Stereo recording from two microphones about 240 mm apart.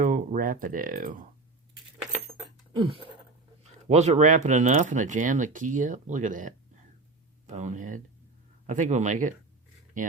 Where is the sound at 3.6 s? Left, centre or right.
Right.